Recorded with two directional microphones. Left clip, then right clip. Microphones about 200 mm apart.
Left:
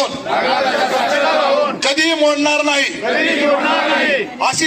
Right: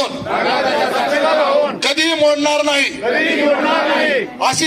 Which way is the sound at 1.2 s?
20° right (ahead or behind).